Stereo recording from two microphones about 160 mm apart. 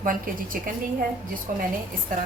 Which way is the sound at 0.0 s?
60° right (ahead or behind).